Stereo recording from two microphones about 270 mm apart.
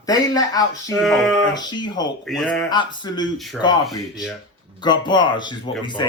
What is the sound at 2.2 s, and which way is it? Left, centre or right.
Speech, centre.